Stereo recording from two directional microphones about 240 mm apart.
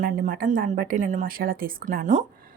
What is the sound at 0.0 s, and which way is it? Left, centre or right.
A woman's voice, right.